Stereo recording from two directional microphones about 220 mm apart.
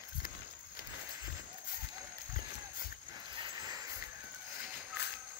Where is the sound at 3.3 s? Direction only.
20° right (ahead or behind).